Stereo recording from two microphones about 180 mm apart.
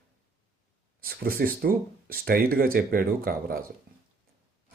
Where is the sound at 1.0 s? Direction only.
55° right (ahead or behind).